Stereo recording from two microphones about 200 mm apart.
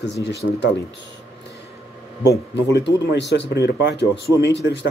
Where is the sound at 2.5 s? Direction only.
60° left (ahead or behind).